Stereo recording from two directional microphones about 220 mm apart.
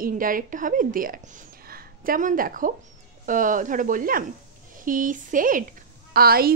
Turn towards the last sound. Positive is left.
turn(degrees=-45)  # may be behind; listen again after turning